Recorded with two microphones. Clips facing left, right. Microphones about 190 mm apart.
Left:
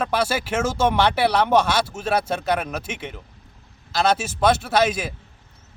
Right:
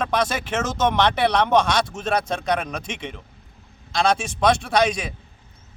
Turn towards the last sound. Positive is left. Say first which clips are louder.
# even
turn(degrees=5)  # may be behind; listen again after turning